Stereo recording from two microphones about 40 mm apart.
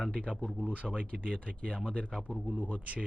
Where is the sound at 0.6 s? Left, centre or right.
Right.